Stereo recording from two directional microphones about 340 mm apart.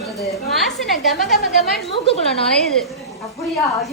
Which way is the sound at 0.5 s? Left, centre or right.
Centre.